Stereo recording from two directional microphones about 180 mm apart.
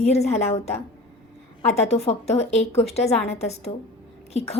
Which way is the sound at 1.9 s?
35° left (ahead or behind).